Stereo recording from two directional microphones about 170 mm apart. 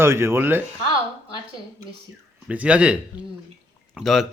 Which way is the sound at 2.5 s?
10° right (ahead or behind).